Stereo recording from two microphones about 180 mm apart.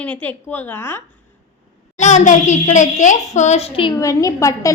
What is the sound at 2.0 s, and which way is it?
A child's voice, 40° left (ahead or behind).